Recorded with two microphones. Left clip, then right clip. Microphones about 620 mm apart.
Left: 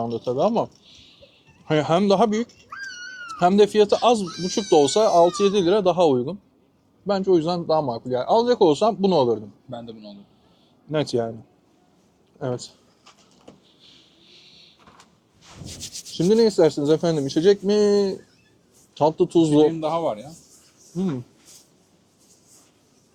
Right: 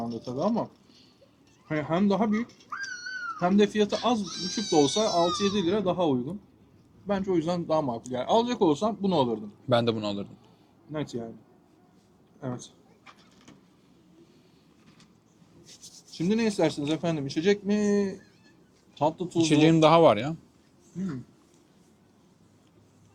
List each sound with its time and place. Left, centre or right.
0.3 s speech: left
1.6 s a man's voice: left
9.6 s speech: right
10.9 s speech: left
16.1 s speech: left
19.4 s speech: right